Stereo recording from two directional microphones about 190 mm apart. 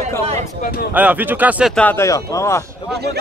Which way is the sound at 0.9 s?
5° right (ahead or behind).